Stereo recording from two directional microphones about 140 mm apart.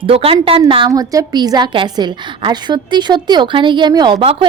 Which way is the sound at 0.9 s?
25° right (ahead or behind).